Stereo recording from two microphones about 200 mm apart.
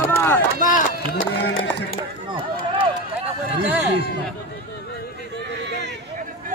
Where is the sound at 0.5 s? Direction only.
40° left (ahead or behind).